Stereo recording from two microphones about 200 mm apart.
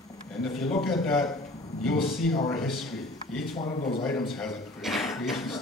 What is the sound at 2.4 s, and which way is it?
Speech, centre (ahead or behind).